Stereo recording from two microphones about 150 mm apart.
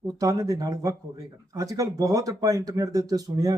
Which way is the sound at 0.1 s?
25° right (ahead or behind).